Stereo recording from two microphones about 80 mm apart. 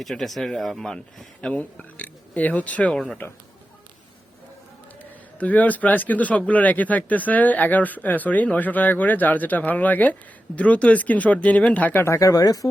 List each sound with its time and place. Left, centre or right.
0.0 s speech: centre
1.4 s speech: centre
5.4 s speech: centre
12.0 s speech: left